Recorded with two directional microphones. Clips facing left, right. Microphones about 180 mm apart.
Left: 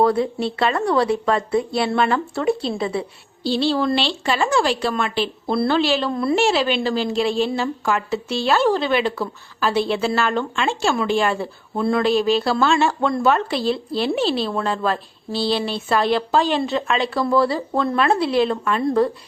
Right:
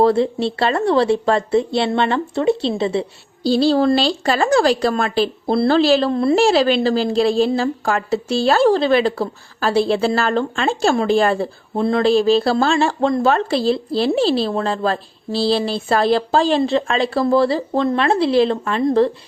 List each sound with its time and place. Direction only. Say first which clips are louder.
0.0 s speech: right 3 dB; 30° right (ahead or behind)
3.4 s a woman's voice: right 5 dB; 40° right (ahead or behind)
11.7 s a woman's voice: right 3 dB; 25° right (ahead or behind)